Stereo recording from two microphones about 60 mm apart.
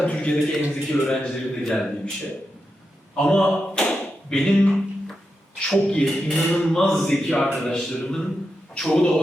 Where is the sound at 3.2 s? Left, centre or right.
Centre.